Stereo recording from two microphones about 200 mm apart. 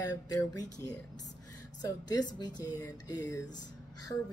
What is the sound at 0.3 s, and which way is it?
A woman's voice, 20° left (ahead or behind).